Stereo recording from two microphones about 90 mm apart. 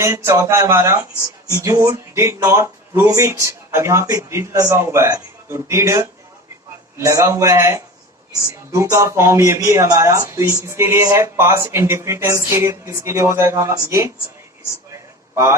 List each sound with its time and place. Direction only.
0.0 s speech: 35° right (ahead or behind)